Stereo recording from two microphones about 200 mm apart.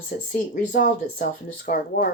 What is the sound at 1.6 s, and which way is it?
Speech, 45° left (ahead or behind).